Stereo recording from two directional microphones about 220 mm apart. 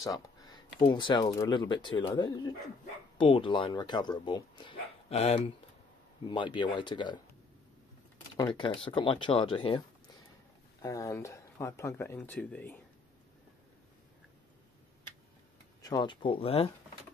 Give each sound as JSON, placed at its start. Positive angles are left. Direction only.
{"t": 0.0, "sound": "speech", "side_deg": 15}
{"t": 8.5, "sound": "speech", "side_deg": 20}
{"t": 10.8, "sound": "speech", "side_deg": 15}
{"t": 15.8, "sound": "speech", "side_deg": 20}